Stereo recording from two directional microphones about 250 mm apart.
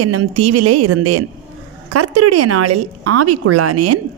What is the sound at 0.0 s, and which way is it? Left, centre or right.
A woman's voice, right.